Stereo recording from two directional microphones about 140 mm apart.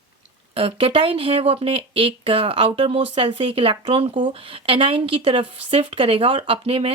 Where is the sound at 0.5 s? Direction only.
45° right (ahead or behind).